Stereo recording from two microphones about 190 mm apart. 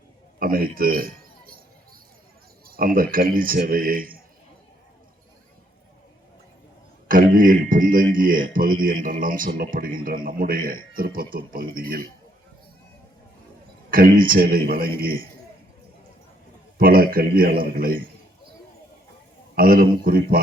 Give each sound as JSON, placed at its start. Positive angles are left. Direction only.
{"t": 0.3, "sound": "a man's voice", "side_deg": -50}
{"t": 2.6, "sound": "a man's voice", "side_deg": -50}
{"t": 7.1, "sound": "a man's voice", "side_deg": -45}
{"t": 13.9, "sound": "a man's voice", "side_deg": -50}
{"t": 16.7, "sound": "a man's voice", "side_deg": -50}
{"t": 19.5, "sound": "a man's voice", "side_deg": -50}